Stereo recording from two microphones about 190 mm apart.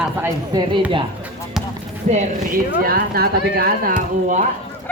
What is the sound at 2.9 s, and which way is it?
Speech, 55° right (ahead or behind).